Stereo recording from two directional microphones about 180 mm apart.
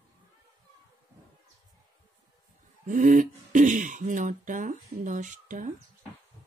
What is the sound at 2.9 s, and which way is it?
Speech, 45° right (ahead or behind).